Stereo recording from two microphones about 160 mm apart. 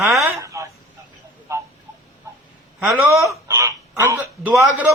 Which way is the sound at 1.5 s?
20° right (ahead or behind).